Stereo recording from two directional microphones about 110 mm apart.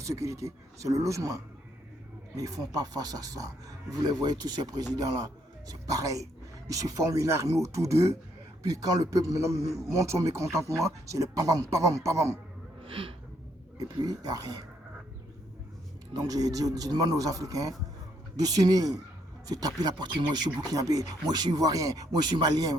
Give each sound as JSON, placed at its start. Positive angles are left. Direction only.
{"t": 0.0, "sound": "a man's voice", "side_deg": -30}
{"t": 12.8, "sound": "a sound", "side_deg": -55}
{"t": 13.7, "sound": "speech", "side_deg": -35}
{"t": 16.1, "sound": "speech", "side_deg": -35}